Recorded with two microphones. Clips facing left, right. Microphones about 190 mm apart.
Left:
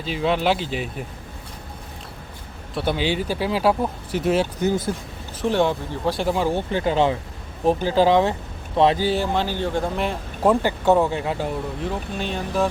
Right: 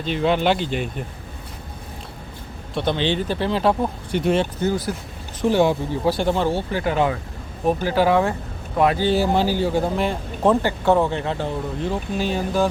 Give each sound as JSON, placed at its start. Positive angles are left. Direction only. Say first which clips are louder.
{"t": 0.0, "sound": "speech", "louder": "right 2 dB", "side_deg": 0}
{"t": 2.7, "sound": "speech", "louder": "right 1 dB", "side_deg": 10}
{"t": 6.5, "sound": "speech", "louder": "left 1 dB", "side_deg": 20}
{"t": 9.1, "sound": "speech", "louder": "right 4 dB", "side_deg": -10}
{"t": 11.8, "sound": "speech", "louder": "right 3 dB", "side_deg": 0}